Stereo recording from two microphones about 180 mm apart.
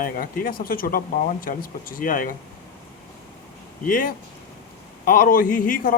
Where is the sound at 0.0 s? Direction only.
55° left (ahead or behind).